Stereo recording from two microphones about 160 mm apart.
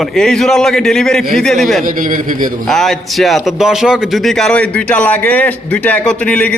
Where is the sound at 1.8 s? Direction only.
55° right (ahead or behind).